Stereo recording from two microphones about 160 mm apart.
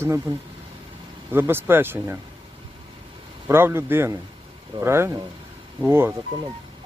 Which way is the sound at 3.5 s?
15° right (ahead or behind).